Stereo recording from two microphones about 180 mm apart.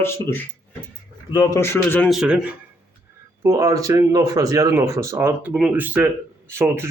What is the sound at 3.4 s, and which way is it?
A man's voice, 15° right (ahead or behind).